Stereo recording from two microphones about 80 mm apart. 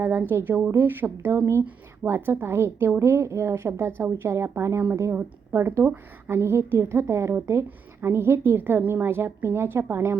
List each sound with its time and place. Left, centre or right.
0.0 s speech: right